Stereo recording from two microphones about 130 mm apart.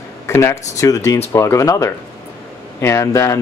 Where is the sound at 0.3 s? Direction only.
20° left (ahead or behind).